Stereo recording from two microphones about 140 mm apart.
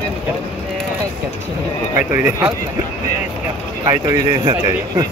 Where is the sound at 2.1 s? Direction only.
15° right (ahead or behind).